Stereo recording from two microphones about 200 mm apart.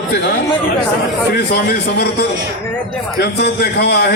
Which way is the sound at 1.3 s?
55° left (ahead or behind).